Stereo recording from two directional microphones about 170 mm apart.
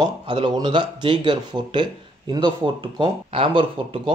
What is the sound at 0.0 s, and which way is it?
Speech, 25° right (ahead or behind).